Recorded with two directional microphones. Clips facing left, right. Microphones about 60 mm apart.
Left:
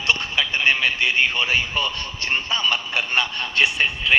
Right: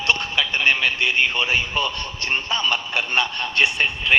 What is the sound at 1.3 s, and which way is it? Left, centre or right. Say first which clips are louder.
Speech: even; right.